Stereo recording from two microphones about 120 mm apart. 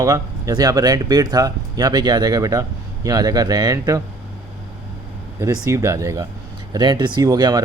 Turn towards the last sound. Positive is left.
turn(degrees=-35)  # may be behind; listen again after turning